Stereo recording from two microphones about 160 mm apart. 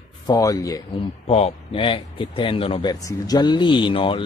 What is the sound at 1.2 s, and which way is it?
Speech, 40° left (ahead or behind).